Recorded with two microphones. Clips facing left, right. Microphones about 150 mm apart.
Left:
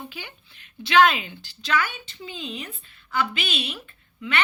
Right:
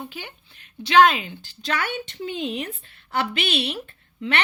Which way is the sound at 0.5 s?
40° right (ahead or behind).